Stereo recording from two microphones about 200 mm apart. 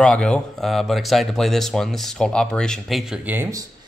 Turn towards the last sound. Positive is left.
turn(degrees=-15)  # may be behind; listen again after turning